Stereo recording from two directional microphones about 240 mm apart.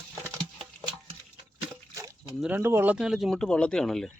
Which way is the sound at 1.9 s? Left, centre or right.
Centre.